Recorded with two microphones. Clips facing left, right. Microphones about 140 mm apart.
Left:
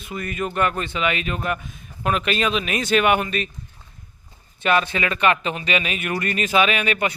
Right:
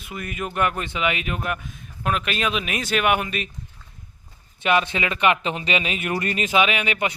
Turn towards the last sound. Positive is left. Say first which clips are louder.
# left 2 dB
turn(degrees=-15)  # may be behind; listen again after turning